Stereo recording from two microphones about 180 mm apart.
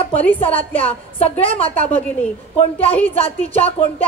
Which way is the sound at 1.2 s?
30° left (ahead or behind).